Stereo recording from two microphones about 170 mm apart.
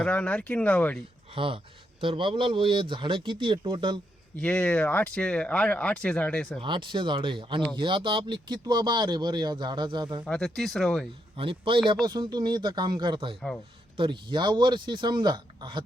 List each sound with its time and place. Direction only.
0.0 s speech: 5° left (ahead or behind)
1.4 s speech: 30° right (ahead or behind)
4.4 s speech: 5° left (ahead or behind)
6.6 s speech: 30° right (ahead or behind)
10.2 s speech: 5° left (ahead or behind)
11.3 s speech: 30° right (ahead or behind)